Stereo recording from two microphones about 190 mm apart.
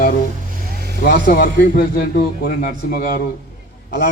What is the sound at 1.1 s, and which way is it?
A man's voice, 50° left (ahead or behind).